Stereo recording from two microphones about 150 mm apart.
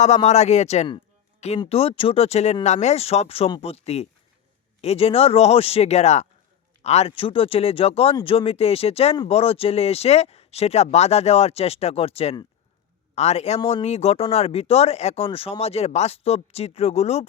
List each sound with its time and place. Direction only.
0.0 s speech: 50° left (ahead or behind)
1.5 s speech: 35° left (ahead or behind)